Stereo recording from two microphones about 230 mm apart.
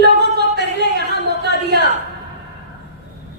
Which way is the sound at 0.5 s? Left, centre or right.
Right.